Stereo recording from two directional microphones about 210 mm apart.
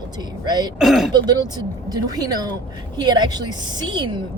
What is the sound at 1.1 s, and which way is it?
Speech, 20° right (ahead or behind).